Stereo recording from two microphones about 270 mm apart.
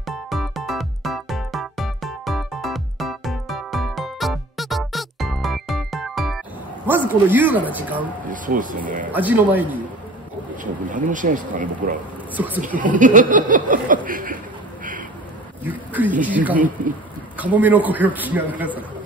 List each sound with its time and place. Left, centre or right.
0.0 s music: centre
6.9 s a man's voice: centre
8.3 s speech: right
9.1 s a man's voice: centre
10.5 s speech: right
12.4 s a man's voice: centre
12.6 s speech: right
15.6 s a man's voice: centre